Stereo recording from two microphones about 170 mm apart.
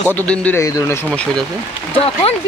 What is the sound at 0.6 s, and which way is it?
Speech, 20° left (ahead or behind).